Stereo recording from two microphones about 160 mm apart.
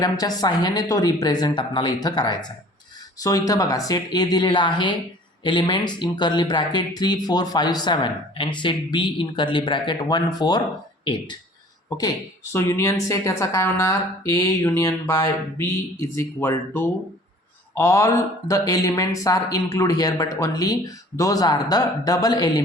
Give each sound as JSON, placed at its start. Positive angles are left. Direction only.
{"t": 0.0, "sound": "speech", "side_deg": 25}